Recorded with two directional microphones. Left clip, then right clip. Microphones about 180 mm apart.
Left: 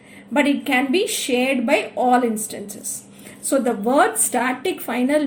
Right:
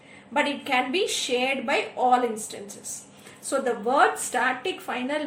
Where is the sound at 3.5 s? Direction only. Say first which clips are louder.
Left 5 dB; 50° left (ahead or behind).